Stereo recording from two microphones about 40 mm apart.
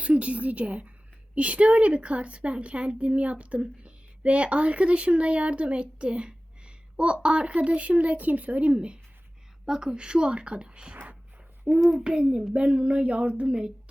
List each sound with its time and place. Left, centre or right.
0.0 s a woman's voice: right
11.7 s a child's voice: centre
12.0 s a woman's voice: right